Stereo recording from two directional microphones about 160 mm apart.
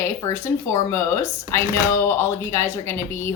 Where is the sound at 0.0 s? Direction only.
15° left (ahead or behind).